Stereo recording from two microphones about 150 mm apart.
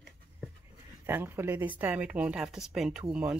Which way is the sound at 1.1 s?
15° right (ahead or behind).